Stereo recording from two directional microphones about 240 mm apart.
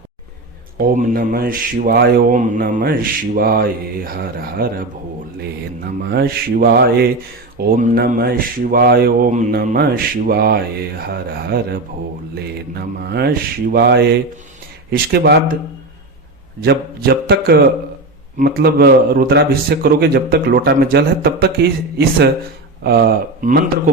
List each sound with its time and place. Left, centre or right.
0.8 s speech: right
12.3 s mantra: right
14.8 s speech: right
16.6 s speech: right